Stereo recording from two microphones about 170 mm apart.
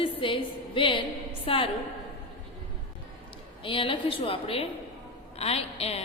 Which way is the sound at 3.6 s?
30° left (ahead or behind).